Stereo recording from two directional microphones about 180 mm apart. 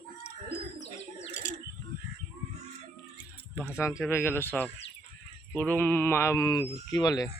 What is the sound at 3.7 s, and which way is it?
Speech, 15° left (ahead or behind).